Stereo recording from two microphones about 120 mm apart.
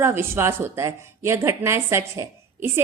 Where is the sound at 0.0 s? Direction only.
20° right (ahead or behind).